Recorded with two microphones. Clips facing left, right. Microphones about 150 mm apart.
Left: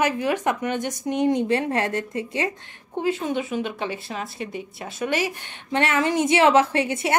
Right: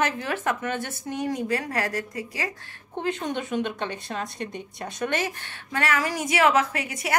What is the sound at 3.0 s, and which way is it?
Speech, 5° left (ahead or behind).